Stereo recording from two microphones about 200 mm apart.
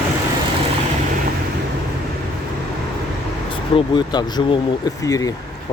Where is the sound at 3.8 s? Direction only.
20° left (ahead or behind).